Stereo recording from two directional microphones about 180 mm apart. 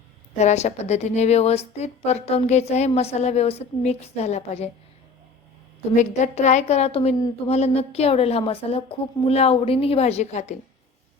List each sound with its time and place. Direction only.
0.3 s a woman's voice: 40° left (ahead or behind)
6.0 s a woman's voice: 40° left (ahead or behind)